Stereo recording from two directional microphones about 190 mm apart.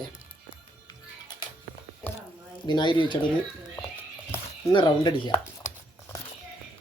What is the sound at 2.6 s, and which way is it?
Speech, 25° left (ahead or behind).